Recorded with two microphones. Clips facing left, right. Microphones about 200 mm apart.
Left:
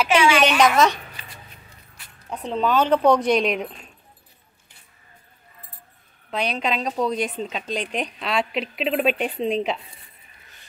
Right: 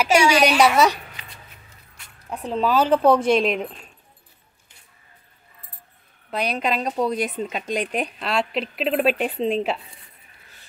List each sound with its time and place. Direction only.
0.1 s a woman's voice: 40° right (ahead or behind)
0.6 s speech: 10° right (ahead or behind)
2.2 s speech: centre (ahead or behind)
6.3 s speech: 5° right (ahead or behind)